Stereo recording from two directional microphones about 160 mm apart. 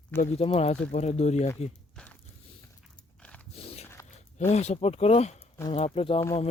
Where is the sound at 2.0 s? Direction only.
5° left (ahead or behind).